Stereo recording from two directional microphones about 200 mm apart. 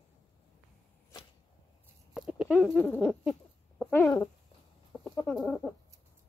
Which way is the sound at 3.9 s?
10° left (ahead or behind).